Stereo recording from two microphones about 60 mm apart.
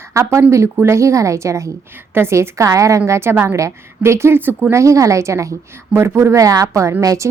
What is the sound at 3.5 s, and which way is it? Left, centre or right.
Speech, right.